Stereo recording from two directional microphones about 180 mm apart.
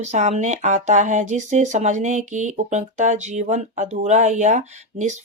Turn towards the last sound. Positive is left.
turn(degrees=-40)  # may be behind; listen again after turning